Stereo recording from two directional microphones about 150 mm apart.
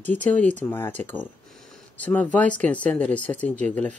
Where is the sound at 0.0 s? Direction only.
10° left (ahead or behind).